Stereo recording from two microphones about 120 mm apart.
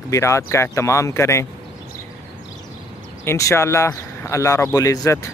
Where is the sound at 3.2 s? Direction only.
25° left (ahead or behind).